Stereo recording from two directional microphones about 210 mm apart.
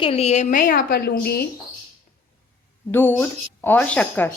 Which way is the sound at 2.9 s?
10° left (ahead or behind).